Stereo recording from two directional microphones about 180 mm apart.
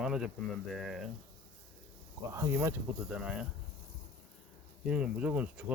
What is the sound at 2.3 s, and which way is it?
Speech, 15° right (ahead or behind).